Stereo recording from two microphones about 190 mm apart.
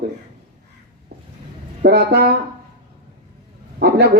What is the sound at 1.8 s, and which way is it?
Speech, 60° right (ahead or behind).